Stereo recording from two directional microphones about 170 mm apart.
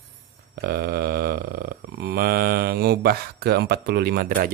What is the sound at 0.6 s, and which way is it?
Mantra, 65° right (ahead or behind).